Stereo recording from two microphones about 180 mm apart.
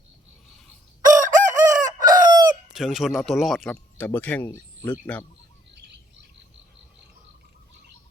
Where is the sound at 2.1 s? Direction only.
20° right (ahead or behind).